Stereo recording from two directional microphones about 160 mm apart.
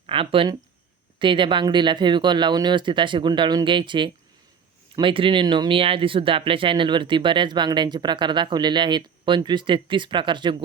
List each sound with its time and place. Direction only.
0.1 s speech: 35° right (ahead or behind)